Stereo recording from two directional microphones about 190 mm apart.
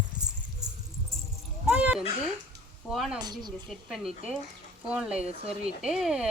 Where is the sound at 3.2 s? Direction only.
20° right (ahead or behind).